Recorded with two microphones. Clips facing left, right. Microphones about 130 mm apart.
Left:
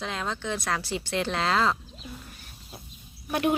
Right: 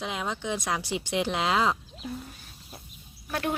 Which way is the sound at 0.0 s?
10° right (ahead or behind).